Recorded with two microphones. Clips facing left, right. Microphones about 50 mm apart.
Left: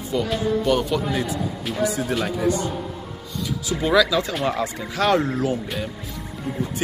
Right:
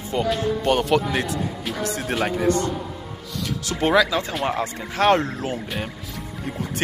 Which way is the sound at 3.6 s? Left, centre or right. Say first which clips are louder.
Right 2 dB; right.